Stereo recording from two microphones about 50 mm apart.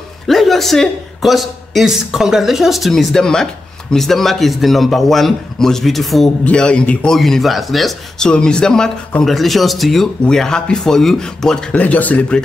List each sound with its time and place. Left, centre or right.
0.3 s a man's voice: centre
2.9 s speech: centre
6.5 s a man's voice: left
7.1 s speech: centre
8.2 s speech: centre
9.2 s speech: centre
11.7 s speech: left